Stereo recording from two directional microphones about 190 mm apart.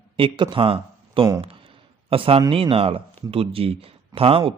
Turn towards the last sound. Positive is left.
turn(degrees=-30)  # may be behind; listen again after turning